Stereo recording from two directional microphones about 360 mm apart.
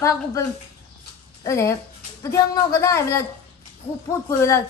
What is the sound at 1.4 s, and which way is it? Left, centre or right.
A woman's voice, centre.